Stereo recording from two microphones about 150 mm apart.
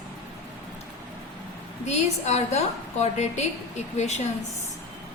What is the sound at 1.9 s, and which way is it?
A woman's voice, 50° left (ahead or behind).